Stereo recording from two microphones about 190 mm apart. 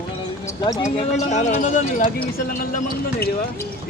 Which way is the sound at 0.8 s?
40° left (ahead or behind).